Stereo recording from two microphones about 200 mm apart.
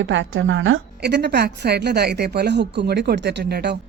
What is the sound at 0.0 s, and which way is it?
A woman's voice, 65° right (ahead or behind).